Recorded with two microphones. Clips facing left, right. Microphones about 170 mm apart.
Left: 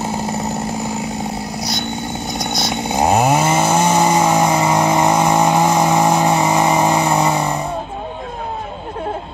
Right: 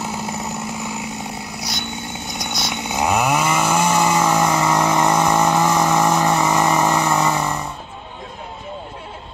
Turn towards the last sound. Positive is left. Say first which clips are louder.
# left 3 dB
turn(degrees=15)  # may be behind; listen again after turning